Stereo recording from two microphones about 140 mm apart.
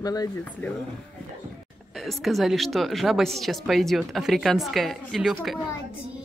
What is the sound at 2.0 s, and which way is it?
Speech, centre (ahead or behind).